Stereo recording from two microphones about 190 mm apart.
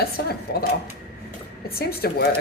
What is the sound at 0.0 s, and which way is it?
Speech, 55° left (ahead or behind).